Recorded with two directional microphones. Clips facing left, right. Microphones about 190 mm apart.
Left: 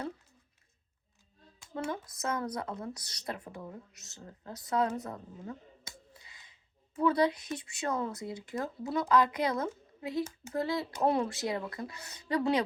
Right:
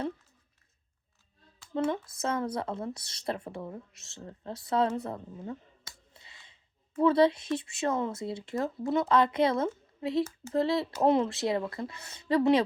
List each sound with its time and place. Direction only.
1.7 s speech: 25° right (ahead or behind)
6.1 s a sound: 25° right (ahead or behind)
7.6 s speech: 25° right (ahead or behind)